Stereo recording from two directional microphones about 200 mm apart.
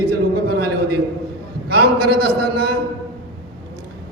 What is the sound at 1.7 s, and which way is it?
A man's voice, 50° right (ahead or behind).